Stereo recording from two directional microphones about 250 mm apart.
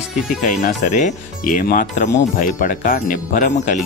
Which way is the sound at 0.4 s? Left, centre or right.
Left.